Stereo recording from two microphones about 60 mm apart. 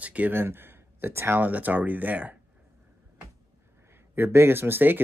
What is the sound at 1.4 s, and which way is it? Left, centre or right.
Speech, right.